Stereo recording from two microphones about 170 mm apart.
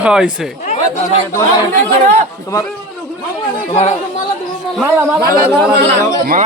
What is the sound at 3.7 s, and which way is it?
Speech, 35° left (ahead or behind).